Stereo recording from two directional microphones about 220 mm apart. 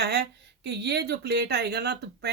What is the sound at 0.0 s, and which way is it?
Speech, 50° right (ahead or behind).